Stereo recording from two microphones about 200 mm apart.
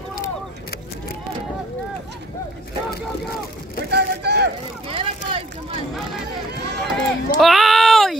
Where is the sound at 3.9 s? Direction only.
55° right (ahead or behind).